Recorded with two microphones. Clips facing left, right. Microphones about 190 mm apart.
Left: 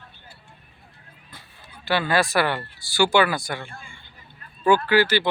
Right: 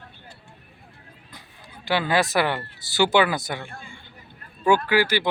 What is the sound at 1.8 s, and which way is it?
Speech, 15° right (ahead or behind).